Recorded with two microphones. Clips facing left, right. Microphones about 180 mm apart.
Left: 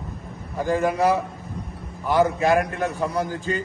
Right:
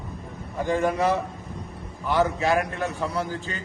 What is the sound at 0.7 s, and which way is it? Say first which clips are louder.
Speech: left 2 dB; 5° left (ahead or behind).